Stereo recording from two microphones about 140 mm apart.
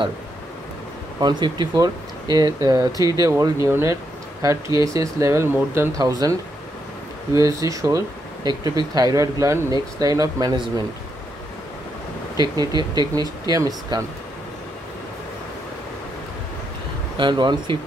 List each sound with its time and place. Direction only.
1.2 s speech: 30° right (ahead or behind)
7.3 s speech: 25° right (ahead or behind)
12.4 s speech: 30° right (ahead or behind)
17.2 s speech: 35° right (ahead or behind)